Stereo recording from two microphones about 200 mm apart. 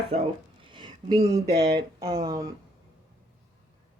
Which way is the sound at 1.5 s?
55° right (ahead or behind).